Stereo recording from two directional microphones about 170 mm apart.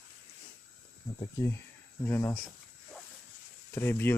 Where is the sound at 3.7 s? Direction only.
15° left (ahead or behind).